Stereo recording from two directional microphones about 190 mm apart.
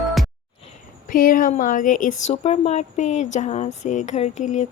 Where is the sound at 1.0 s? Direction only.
45° left (ahead or behind).